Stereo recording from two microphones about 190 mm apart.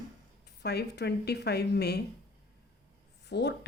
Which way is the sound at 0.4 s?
60° left (ahead or behind).